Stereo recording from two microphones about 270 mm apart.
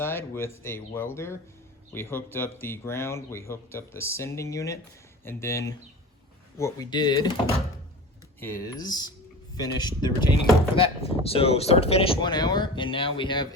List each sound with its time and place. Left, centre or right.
0.0 s speech: centre
8.4 s speech: centre